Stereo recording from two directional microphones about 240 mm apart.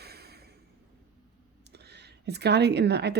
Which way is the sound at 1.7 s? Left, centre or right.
Right.